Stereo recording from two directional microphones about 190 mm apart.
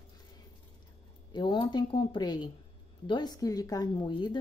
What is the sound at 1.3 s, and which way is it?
A woman's voice, 25° left (ahead or behind).